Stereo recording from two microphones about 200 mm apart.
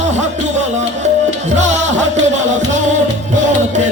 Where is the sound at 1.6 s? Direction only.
35° right (ahead or behind).